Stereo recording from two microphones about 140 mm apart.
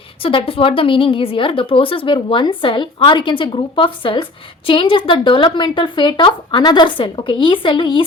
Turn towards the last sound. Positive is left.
turn(degrees=35)  # may be behind; listen again after turning